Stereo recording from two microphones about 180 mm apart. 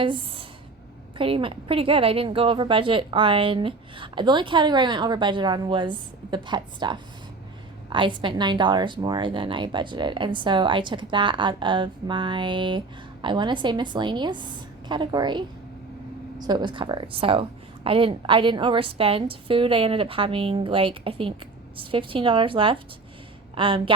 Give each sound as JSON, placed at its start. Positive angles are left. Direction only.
{"t": 0.0, "sound": "a woman's voice", "side_deg": -30}